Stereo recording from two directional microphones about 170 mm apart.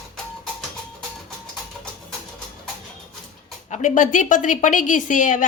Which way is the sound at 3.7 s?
45° left (ahead or behind).